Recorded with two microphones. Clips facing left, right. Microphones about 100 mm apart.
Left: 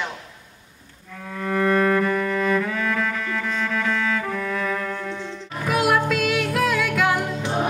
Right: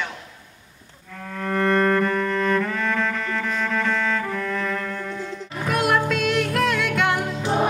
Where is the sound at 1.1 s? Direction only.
Centre (ahead or behind).